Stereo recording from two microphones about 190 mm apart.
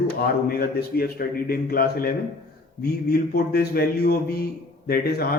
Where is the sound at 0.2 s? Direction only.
50° left (ahead or behind).